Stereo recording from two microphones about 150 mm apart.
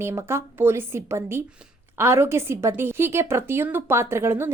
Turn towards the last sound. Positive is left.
turn(degrees=-15)  # may be behind; listen again after turning